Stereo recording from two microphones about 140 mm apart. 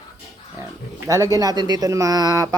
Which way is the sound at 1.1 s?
25° right (ahead or behind).